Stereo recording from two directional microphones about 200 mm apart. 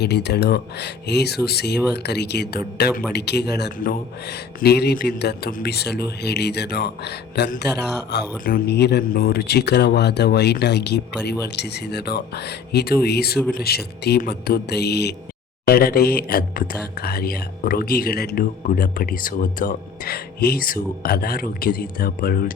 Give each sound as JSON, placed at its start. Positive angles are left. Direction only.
{"t": 0.0, "sound": "speech", "side_deg": 55}